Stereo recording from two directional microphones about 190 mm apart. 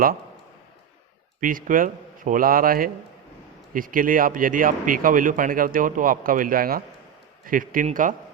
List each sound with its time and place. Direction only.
1.4 s speech: 45° right (ahead or behind)